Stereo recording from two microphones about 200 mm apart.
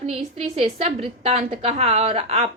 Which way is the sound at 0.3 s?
30° right (ahead or behind).